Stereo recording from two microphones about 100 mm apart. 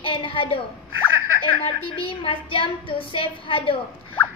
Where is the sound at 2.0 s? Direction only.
60° left (ahead or behind).